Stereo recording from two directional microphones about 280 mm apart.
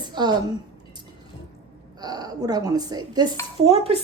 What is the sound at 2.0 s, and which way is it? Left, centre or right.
A woman's voice, centre.